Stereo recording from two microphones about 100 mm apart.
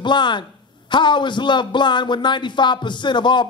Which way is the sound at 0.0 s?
50° left (ahead or behind).